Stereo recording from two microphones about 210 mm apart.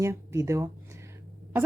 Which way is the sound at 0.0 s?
15° right (ahead or behind).